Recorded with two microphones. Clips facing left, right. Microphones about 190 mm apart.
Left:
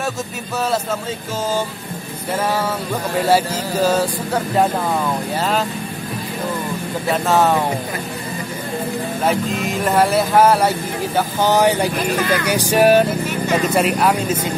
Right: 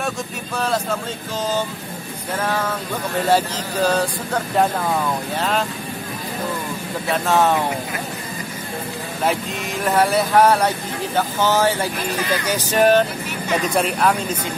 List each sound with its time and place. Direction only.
2.4 s speech: 10° left (ahead or behind)
5.4 s speech: centre (ahead or behind)
7.1 s speech: centre (ahead or behind)
9.2 s speech: centre (ahead or behind)
11.1 s speech: 15° left (ahead or behind)
12.2 s speech: 50° left (ahead or behind)
12.4 s speech: 10° left (ahead or behind)